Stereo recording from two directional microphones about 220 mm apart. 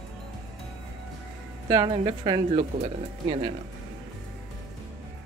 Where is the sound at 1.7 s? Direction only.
20° right (ahead or behind).